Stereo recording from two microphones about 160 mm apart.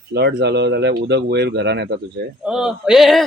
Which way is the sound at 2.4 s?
5° right (ahead or behind).